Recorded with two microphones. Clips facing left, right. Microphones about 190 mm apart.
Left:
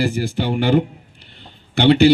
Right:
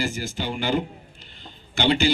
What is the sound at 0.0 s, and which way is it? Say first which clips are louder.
Speech: left 7 dB; 65° left (ahead or behind).